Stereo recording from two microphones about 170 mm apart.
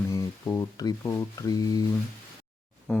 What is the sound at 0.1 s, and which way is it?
Speech, 20° left (ahead or behind).